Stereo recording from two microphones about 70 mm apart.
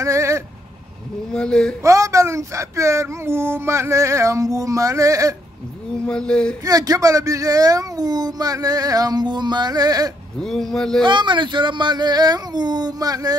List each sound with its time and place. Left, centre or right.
0.0 s vehicle: right
1.3 s speech: centre
1.8 s speech: right
6.0 s speech: centre
6.6 s speech: right
10.4 s speech: centre
11.1 s speech: right